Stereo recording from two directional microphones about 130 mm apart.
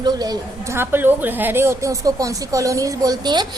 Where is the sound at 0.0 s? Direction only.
30° right (ahead or behind).